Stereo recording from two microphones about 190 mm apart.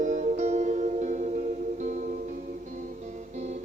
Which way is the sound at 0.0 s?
40° right (ahead or behind).